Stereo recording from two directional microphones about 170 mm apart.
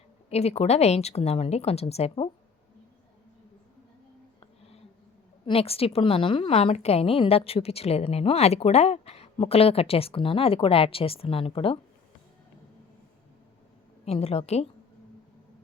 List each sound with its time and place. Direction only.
0.3 s a woman's voice: 40° left (ahead or behind)
4.4 s a sound: 35° left (ahead or behind)
5.5 s a woman's voice: 35° left (ahead or behind)
14.0 s a woman's voice: 40° left (ahead or behind)